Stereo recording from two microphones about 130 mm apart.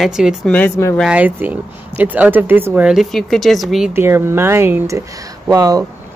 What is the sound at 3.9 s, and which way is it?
Speech, 20° right (ahead or behind).